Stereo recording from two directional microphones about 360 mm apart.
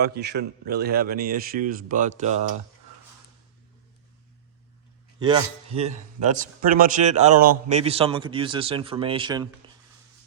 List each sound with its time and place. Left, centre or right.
0.0 s a man's voice: right
5.2 s a man's voice: centre